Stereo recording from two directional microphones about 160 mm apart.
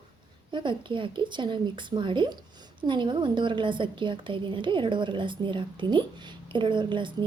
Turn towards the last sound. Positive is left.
turn(degrees=-30)  # may be behind; listen again after turning